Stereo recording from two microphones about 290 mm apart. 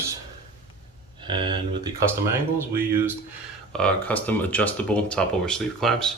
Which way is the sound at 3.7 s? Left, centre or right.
Centre.